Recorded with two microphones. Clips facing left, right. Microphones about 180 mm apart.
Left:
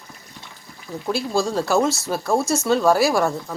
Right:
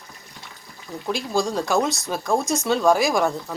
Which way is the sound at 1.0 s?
5° left (ahead or behind).